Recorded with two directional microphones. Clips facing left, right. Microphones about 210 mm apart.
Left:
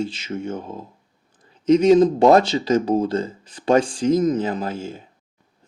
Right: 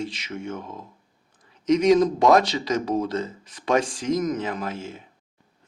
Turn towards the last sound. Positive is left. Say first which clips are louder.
# left 4 dB
turn(degrees=30)  # may be behind; listen again after turning